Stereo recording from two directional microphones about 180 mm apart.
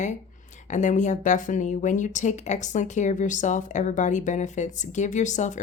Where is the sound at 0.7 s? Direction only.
45° left (ahead or behind).